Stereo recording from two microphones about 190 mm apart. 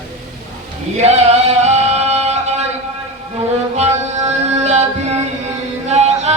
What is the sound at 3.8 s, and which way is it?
Music, 35° right (ahead or behind).